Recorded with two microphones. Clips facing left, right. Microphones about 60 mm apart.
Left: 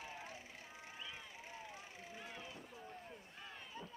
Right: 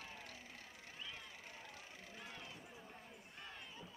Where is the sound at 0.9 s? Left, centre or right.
Centre.